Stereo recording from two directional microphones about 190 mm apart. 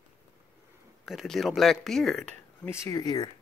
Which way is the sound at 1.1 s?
Centre (ahead or behind).